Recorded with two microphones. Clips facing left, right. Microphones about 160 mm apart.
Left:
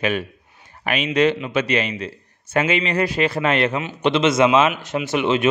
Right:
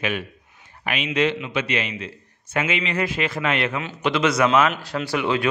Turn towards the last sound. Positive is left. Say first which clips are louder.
# left 3 dB
turn(degrees=20)  # may be behind; listen again after turning